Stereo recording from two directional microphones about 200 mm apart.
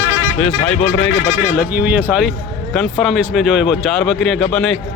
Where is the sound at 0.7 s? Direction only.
5° left (ahead or behind).